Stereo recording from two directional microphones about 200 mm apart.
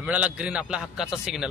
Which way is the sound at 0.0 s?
5° right (ahead or behind).